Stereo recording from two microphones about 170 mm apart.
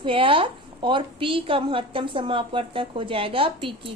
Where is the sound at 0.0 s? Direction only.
30° right (ahead or behind).